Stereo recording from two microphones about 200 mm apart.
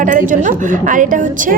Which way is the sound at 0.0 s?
40° right (ahead or behind).